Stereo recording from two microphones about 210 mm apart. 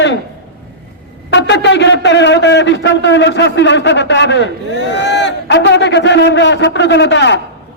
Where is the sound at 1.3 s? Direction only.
55° left (ahead or behind).